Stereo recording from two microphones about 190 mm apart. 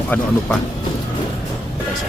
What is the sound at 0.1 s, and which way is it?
Speech, 5° left (ahead or behind).